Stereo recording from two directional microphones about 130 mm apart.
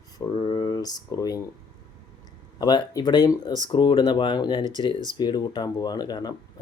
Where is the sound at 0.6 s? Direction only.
30° left (ahead or behind).